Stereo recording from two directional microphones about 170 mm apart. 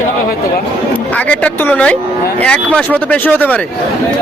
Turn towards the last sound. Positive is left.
turn(degrees=10)  # may be behind; listen again after turning